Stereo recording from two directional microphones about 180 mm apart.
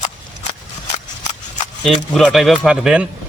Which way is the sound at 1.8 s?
Centre (ahead or behind).